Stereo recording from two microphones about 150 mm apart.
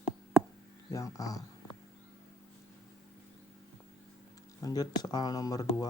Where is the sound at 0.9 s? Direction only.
25° left (ahead or behind).